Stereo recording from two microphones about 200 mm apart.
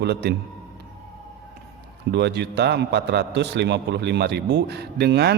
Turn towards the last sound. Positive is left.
turn(degrees=-55)  # may be behind; listen again after turning